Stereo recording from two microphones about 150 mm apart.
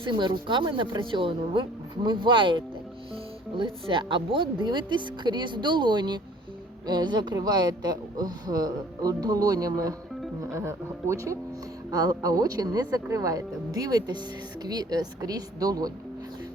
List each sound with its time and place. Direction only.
0.0 s speech: 30° right (ahead or behind)